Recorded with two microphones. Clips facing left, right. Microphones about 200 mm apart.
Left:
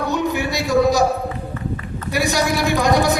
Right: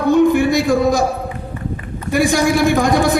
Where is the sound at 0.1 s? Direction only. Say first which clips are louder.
Right 13 dB; 50° right (ahead or behind).